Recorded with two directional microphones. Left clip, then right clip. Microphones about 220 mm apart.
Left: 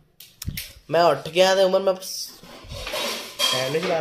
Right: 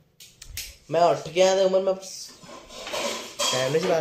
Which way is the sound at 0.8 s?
35° left (ahead or behind).